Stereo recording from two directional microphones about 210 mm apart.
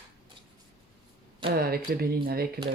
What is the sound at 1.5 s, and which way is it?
Speech, 45° right (ahead or behind).